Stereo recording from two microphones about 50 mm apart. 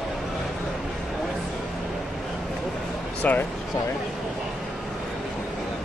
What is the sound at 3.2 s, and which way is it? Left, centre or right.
Speech, left.